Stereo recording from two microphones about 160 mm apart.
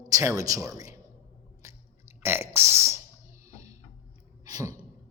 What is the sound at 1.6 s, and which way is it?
Burping, 15° right (ahead or behind).